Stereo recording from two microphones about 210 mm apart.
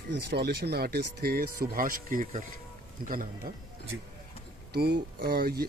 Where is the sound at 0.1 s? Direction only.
55° right (ahead or behind).